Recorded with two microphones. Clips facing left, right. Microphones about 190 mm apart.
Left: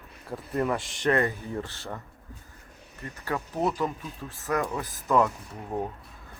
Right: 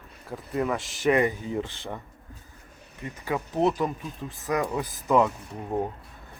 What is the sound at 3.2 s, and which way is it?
Speech, 15° right (ahead or behind).